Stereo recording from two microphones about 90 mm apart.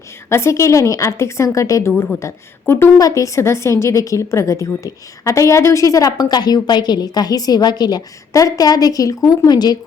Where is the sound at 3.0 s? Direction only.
35° left (ahead or behind).